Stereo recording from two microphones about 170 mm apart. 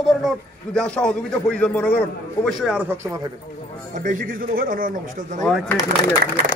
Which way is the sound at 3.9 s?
50° right (ahead or behind).